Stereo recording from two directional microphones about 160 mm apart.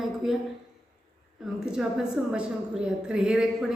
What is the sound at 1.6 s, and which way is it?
A woman's voice, 5° right (ahead or behind).